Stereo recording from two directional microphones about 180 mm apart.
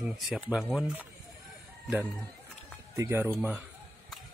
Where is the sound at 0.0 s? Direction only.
5° right (ahead or behind).